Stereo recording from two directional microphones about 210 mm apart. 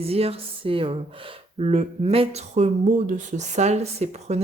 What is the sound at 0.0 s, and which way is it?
Speech, 30° right (ahead or behind).